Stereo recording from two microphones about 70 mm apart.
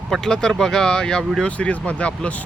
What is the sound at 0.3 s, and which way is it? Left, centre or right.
Speech, centre.